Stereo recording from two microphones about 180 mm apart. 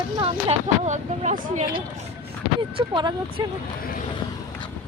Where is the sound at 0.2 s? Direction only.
30° right (ahead or behind).